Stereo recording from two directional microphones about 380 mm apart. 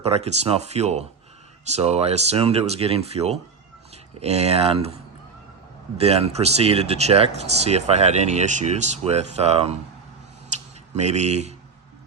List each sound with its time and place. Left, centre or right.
0.0 s speech: centre
6.0 s speech: centre
10.5 s a sound: centre